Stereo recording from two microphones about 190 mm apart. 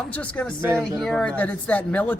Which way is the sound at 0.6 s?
15° right (ahead or behind).